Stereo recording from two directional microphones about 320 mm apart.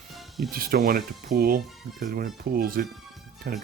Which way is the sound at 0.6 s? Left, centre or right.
Right.